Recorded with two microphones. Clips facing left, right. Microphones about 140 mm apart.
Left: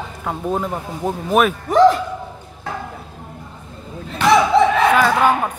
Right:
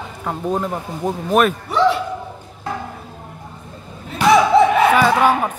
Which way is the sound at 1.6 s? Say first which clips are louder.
Left 4 dB; 45° left (ahead or behind).